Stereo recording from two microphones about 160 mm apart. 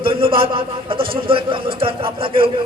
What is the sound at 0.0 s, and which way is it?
A man's voice, 35° right (ahead or behind).